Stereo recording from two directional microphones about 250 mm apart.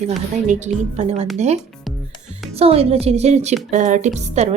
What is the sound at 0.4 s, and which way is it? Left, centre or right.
Speech, right.